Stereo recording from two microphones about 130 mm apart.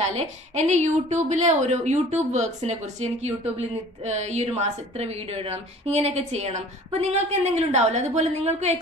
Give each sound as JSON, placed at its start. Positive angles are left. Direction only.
{"t": 0.1, "sound": "a woman's voice", "side_deg": -60}